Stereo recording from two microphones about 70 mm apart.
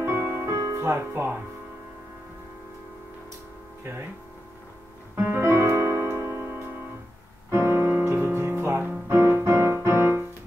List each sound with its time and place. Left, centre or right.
0.0 s music: right
0.6 s speech: right
5.1 s piano: right
7.5 s music: right